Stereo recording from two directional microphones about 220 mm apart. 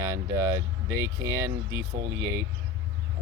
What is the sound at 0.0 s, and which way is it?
Speech, 15° right (ahead or behind).